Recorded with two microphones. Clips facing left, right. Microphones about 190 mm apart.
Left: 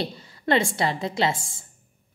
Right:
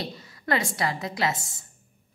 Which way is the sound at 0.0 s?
30° left (ahead or behind).